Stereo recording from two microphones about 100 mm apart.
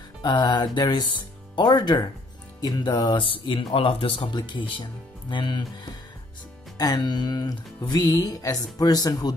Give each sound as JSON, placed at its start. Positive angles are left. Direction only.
{"t": 0.2, "sound": "speech", "side_deg": 45}
{"t": 6.8, "sound": "speech", "side_deg": 40}